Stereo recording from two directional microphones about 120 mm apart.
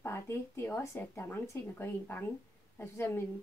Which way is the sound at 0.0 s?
20° left (ahead or behind).